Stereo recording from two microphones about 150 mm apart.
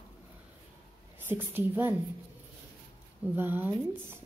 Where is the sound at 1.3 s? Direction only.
15° right (ahead or behind).